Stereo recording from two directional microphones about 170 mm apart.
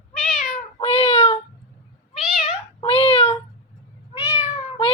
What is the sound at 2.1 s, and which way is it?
Cat, centre (ahead or behind).